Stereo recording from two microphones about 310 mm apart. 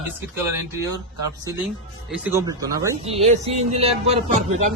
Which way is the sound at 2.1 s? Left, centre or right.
Centre.